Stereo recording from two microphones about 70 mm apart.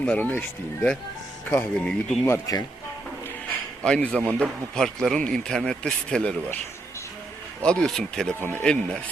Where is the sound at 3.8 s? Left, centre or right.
Centre.